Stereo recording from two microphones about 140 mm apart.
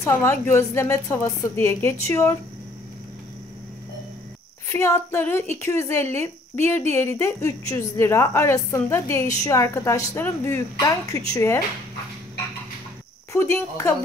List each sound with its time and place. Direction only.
0.0 s speech: 20° left (ahead or behind)
4.6 s speech: 20° left (ahead or behind)
13.3 s speech: 20° left (ahead or behind)